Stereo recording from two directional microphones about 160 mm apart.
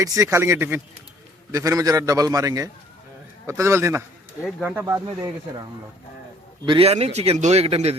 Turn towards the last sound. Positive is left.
turn(degrees=-40)  # may be behind; listen again after turning